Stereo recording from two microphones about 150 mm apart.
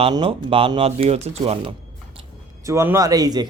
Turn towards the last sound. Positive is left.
turn(degrees=-25)  # may be behind; listen again after turning